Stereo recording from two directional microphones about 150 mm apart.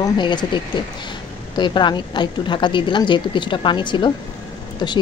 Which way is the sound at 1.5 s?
30° left (ahead or behind).